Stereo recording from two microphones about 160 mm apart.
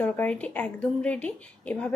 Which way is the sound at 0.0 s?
10° left (ahead or behind).